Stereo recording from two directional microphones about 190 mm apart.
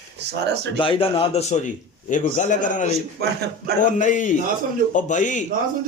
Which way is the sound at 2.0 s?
40° left (ahead or behind).